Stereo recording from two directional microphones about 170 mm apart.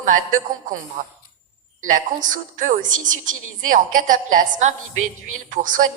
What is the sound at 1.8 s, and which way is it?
Speech, 50° right (ahead or behind).